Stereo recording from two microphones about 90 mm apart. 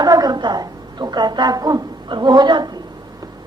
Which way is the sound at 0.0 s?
45° right (ahead or behind).